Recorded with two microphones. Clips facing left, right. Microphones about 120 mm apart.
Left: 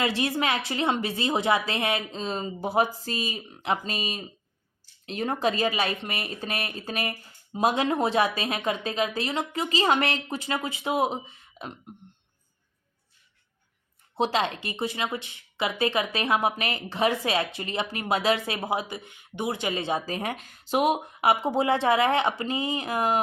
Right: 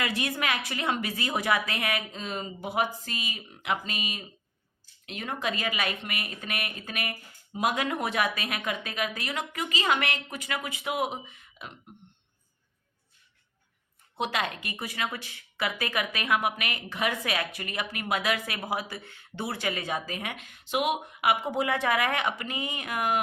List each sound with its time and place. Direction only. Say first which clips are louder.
0.0 s speech: left 4 dB; 30° left (ahead or behind)
14.2 s speech: left 5 dB; 30° left (ahead or behind)